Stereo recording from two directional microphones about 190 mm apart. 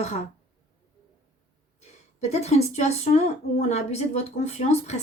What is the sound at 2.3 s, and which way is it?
Speech, 35° left (ahead or behind).